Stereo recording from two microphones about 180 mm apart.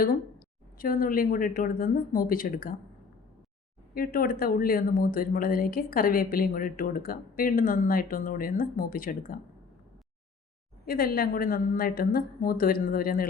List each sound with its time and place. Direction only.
0.8 s speech: 50° left (ahead or behind)
3.9 s speech: 55° left (ahead or behind)
10.8 s a woman's voice: 55° left (ahead or behind)